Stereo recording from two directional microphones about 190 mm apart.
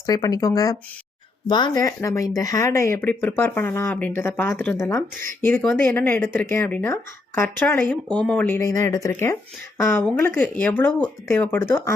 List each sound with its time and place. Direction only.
0.0 s speech: 20° left (ahead or behind)